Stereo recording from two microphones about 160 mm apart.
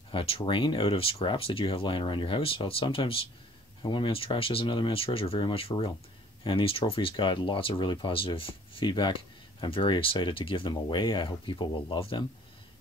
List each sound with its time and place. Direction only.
0.1 s speech: 35° left (ahead or behind)